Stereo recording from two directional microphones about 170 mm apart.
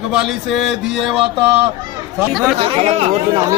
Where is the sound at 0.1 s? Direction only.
5° right (ahead or behind).